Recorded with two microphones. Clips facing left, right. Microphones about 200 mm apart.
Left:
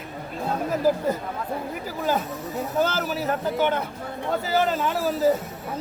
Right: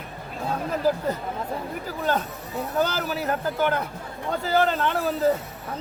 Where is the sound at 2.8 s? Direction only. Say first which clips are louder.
Left 1 dB; 5° left (ahead or behind).